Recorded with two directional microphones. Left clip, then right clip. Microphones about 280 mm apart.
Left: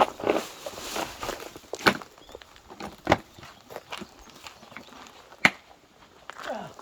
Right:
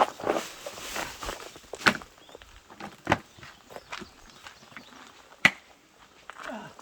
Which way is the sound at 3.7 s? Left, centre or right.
Left.